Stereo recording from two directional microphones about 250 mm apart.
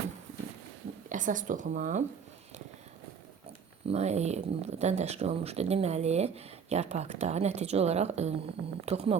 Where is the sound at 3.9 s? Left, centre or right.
Right.